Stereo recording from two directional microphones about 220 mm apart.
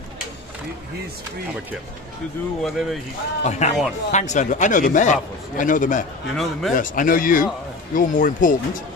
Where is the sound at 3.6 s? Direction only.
30° left (ahead or behind).